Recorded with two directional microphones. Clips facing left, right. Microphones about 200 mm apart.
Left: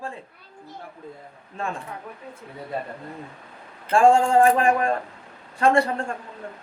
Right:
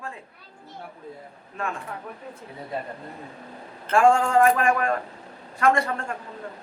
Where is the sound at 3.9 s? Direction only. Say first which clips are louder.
Left 2 dB; 30° left (ahead or behind).